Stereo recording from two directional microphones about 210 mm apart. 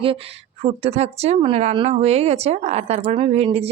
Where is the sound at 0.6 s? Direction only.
30° right (ahead or behind).